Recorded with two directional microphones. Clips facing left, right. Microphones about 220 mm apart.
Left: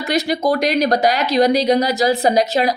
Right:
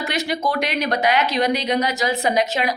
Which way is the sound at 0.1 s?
35° left (ahead or behind).